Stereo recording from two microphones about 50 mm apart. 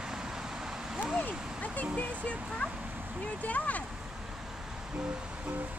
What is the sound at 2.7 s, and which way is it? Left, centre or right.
Speech, right.